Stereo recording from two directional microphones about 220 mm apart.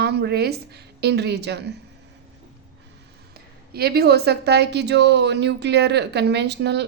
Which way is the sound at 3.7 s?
45° right (ahead or behind).